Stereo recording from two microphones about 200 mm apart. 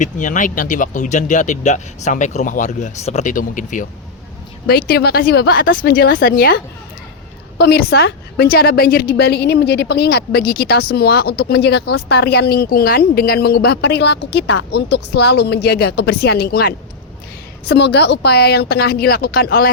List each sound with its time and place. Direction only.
0.0 s speech: 40° left (ahead or behind)
4.6 s a woman's voice: 50° left (ahead or behind)
7.6 s a woman's voice: 55° left (ahead or behind)